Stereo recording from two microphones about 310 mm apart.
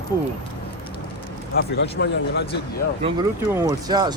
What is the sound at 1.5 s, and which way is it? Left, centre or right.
Speech, left.